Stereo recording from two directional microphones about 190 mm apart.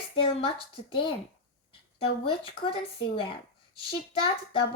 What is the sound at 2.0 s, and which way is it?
A child's voice, 30° left (ahead or behind).